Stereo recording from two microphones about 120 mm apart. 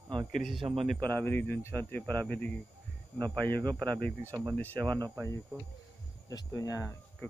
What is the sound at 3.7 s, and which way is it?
Speech, 35° right (ahead or behind).